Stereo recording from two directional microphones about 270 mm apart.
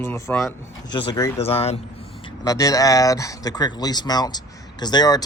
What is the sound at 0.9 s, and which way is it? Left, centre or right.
Speech, centre.